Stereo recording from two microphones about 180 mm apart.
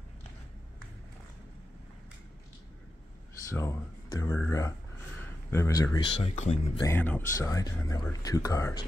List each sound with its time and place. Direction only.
3.4 s speech: 15° left (ahead or behind)
6.2 s speech: 40° left (ahead or behind)
6.8 s speech: 10° left (ahead or behind)